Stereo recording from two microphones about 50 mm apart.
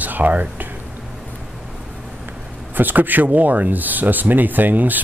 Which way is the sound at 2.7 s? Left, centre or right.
Right.